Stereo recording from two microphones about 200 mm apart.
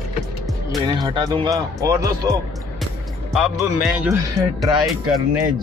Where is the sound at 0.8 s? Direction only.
20° right (ahead or behind).